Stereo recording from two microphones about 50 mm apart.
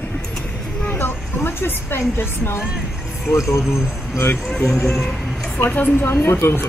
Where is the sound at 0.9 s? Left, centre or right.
Left.